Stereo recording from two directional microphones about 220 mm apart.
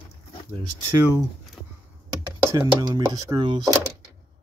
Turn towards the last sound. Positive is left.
turn(degrees=-20)  # may be behind; listen again after turning